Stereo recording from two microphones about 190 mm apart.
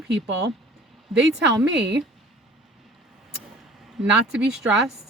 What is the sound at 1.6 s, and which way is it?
Speech, 65° right (ahead or behind).